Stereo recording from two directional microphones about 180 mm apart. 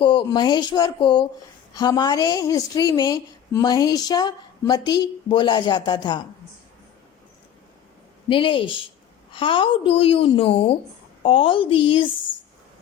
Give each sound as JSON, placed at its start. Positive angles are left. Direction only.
{"t": 0.0, "sound": "a woman's voice", "side_deg": 25}
{"t": 8.3, "sound": "a woman's voice", "side_deg": 30}